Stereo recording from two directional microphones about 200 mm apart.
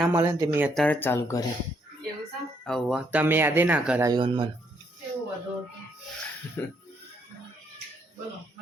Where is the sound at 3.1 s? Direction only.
10° right (ahead or behind).